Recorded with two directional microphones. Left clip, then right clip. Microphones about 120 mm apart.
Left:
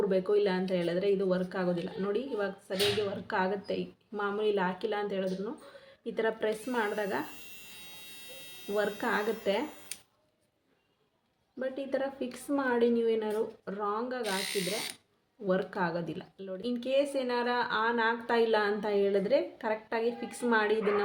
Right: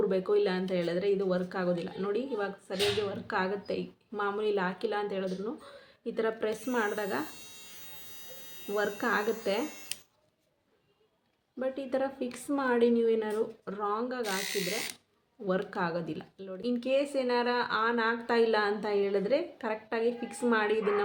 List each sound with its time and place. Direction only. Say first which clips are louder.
0.0 s speech: even; 10° right (ahead or behind)
8.7 s speech: right 1 dB; 10° right (ahead or behind)
9.6 s a sound: right 4 dB; 35° right (ahead or behind)
11.6 s speech: right 1 dB; 10° right (ahead or behind)